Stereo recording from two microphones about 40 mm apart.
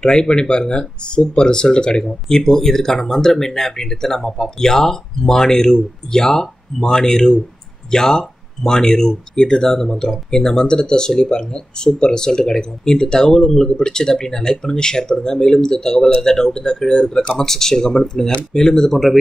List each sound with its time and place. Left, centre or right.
0.0 s speech: centre